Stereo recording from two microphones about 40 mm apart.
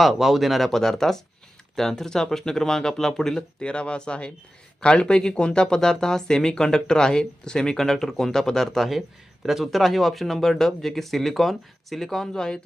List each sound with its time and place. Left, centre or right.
0.0 s speech: centre
3.6 s speech: left